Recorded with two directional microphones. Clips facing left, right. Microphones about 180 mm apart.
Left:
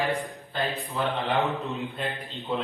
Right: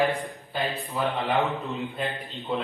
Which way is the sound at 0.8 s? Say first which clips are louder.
Right 1 dB; centre (ahead or behind).